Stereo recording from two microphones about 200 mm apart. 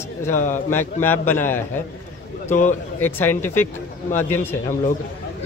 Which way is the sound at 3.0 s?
10° left (ahead or behind).